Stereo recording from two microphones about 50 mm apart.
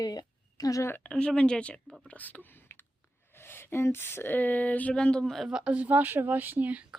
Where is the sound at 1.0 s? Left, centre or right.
Centre.